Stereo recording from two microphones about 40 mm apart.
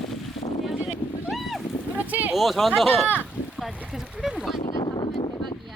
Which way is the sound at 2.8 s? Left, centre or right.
Left.